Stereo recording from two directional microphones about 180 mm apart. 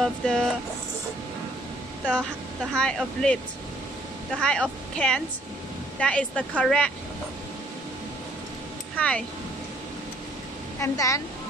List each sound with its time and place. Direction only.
0.0 s a woman's voice: centre (ahead or behind)
2.7 s a woman's voice: 5° left (ahead or behind)
4.4 s a woman's voice: 5° left (ahead or behind)
8.9 s speech: 5° left (ahead or behind)
10.8 s speech: 15° left (ahead or behind)